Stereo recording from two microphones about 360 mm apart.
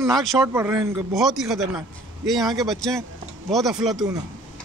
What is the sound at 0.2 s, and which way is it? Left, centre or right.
Speech, centre.